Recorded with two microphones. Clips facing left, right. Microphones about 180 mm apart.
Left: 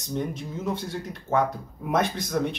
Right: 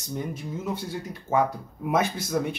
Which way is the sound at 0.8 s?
10° right (ahead or behind).